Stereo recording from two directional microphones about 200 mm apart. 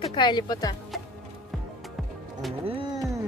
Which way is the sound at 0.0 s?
25° left (ahead or behind).